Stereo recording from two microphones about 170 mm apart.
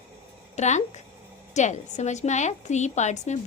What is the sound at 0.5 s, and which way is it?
A woman's voice, 45° left (ahead or behind).